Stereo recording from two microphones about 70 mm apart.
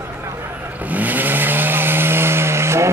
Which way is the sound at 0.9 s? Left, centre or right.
Right.